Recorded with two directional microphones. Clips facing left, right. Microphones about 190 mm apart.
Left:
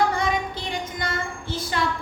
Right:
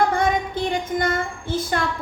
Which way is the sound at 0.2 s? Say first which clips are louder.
Right 4 dB; 50° right (ahead or behind).